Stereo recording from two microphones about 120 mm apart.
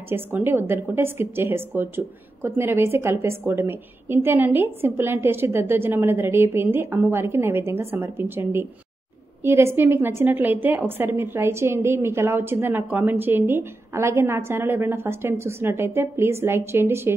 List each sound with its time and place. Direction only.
0.1 s a woman's voice: 20° right (ahead or behind)